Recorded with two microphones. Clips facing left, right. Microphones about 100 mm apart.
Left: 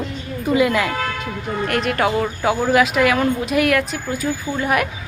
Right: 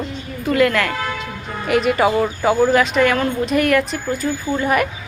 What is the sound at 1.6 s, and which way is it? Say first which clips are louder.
Speech: right 4 dB; centre (ahead or behind).